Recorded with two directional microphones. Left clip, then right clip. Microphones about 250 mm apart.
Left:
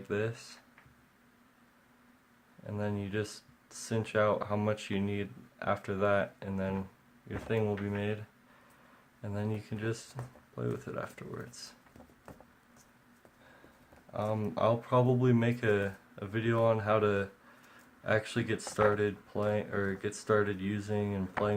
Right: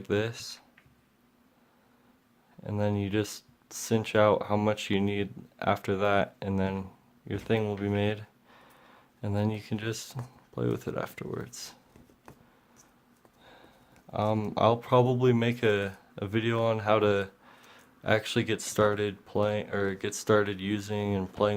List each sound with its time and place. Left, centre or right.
0.0 s speech: right
2.6 s speech: right
9.2 s speech: right
14.1 s speech: right